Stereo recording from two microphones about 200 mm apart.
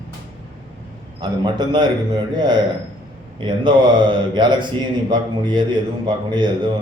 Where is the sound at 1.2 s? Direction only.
20° right (ahead or behind).